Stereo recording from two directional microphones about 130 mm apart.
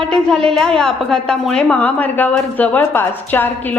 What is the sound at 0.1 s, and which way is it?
A woman's voice, 5° left (ahead or behind).